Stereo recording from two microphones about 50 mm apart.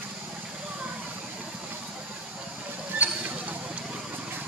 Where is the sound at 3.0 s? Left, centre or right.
Right.